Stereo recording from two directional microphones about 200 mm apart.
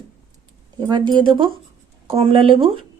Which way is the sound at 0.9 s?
20° right (ahead or behind).